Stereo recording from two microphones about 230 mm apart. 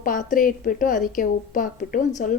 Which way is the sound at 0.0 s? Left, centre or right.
Left.